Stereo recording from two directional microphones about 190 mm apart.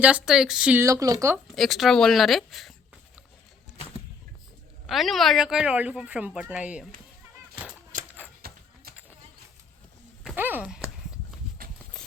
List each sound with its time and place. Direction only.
0.0 s speech: 5° right (ahead or behind)
1.5 s speech: centre (ahead or behind)
4.9 s speech: centre (ahead or behind)
7.9 s a sound: 45° right (ahead or behind)
10.3 s a sound: 10° right (ahead or behind)
11.9 s ratchet: 5° left (ahead or behind)